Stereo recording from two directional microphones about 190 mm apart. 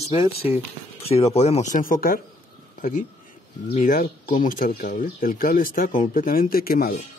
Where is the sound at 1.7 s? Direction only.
45° left (ahead or behind).